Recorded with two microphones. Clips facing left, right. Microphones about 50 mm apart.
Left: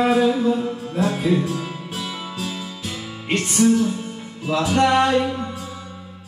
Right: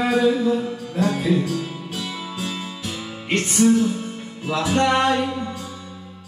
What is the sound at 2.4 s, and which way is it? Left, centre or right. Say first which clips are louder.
Music: even; right.